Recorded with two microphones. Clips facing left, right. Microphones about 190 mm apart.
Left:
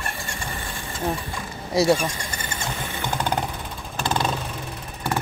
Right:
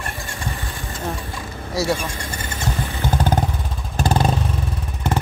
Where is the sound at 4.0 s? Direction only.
40° right (ahead or behind).